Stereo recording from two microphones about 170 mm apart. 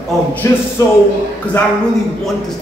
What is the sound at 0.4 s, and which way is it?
Speech, 15° left (ahead or behind).